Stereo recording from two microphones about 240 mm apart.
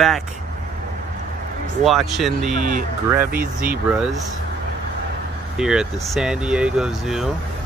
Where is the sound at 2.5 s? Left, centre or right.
Right.